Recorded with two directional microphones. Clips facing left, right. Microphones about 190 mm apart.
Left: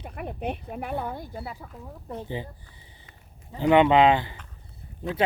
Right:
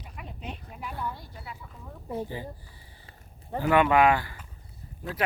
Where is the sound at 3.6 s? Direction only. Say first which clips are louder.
Left 3 dB; 20° left (ahead or behind).